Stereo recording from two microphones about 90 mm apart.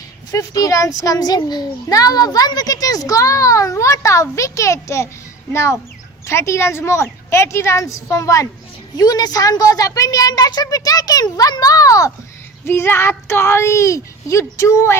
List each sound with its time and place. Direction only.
0.3 s a child's voice: 40° left (ahead or behind)
12.6 s speech: 25° left (ahead or behind)